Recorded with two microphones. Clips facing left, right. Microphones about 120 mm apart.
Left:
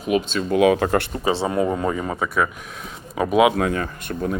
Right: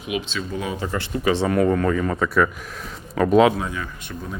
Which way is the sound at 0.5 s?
75° left (ahead or behind).